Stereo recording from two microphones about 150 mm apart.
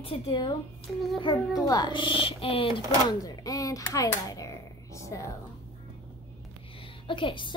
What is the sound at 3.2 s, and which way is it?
Speech, 25° left (ahead or behind).